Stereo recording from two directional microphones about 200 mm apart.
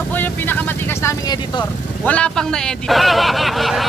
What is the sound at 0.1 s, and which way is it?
Vehicle, 10° left (ahead or behind).